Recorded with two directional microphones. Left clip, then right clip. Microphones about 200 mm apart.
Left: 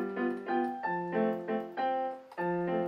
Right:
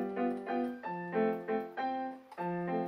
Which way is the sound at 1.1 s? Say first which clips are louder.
Right 3 dB; 40° left (ahead or behind).